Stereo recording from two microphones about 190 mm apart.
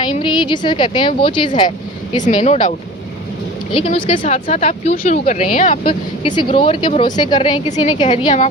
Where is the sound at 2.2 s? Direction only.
35° left (ahead or behind).